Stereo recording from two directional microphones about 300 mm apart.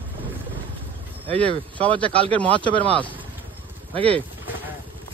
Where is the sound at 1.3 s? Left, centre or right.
Centre.